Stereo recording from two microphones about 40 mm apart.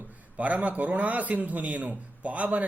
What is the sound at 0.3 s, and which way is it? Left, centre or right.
A man's voice, right.